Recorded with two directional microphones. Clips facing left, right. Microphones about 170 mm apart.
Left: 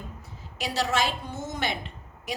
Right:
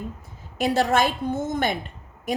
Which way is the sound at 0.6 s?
50° right (ahead or behind).